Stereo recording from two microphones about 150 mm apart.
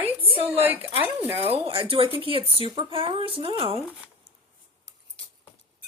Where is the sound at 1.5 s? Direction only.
40° right (ahead or behind).